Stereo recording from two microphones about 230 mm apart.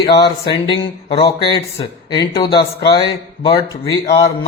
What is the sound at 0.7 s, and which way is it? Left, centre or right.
Speech, left.